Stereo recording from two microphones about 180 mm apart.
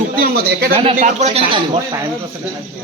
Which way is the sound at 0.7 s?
30° right (ahead or behind).